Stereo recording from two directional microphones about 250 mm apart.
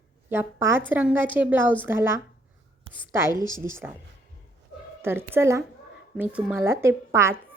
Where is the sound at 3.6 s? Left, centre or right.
Centre.